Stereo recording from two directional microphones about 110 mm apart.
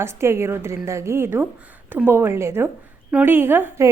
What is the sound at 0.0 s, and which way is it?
A woman's voice, 25° right (ahead or behind).